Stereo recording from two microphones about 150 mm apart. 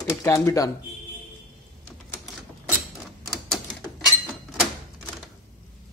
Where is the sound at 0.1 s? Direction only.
20° left (ahead or behind).